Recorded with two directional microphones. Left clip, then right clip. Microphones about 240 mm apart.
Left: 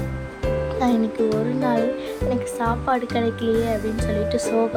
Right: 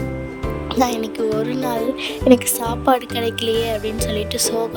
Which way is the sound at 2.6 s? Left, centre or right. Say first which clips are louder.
Right 4 dB; right.